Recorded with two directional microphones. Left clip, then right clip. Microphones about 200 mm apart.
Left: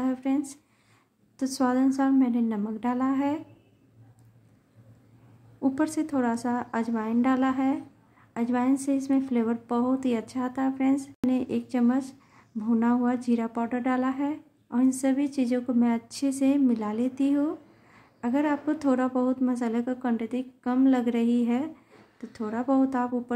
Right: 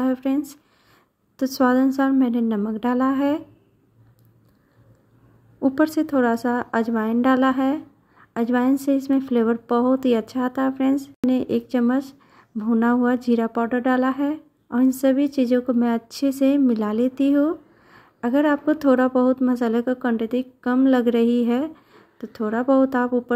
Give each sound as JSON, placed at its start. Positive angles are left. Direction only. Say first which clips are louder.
{"t": 0.0, "sound": "speech", "louder": "right 5 dB", "side_deg": -25}
{"t": 5.6, "sound": "speech", "louder": "right 7 dB", "side_deg": -25}